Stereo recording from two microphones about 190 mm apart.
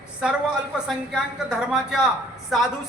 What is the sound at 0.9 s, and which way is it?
A man's voice, 5° right (ahead or behind).